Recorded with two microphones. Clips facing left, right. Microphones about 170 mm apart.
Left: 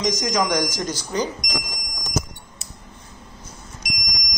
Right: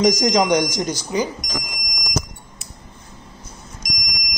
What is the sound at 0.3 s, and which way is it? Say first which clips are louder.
Speech: right 4 dB; 20° right (ahead or behind).